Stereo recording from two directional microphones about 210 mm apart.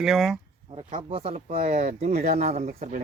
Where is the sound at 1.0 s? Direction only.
25° right (ahead or behind).